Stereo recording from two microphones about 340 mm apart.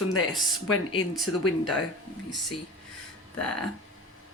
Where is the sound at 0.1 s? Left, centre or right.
Left.